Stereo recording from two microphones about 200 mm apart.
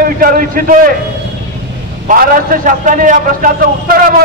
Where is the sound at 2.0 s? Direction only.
45° right (ahead or behind).